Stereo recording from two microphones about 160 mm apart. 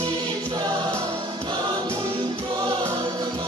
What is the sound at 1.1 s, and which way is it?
Music, 35° right (ahead or behind).